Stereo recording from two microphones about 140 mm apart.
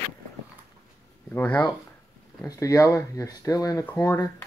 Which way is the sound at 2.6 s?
25° left (ahead or behind).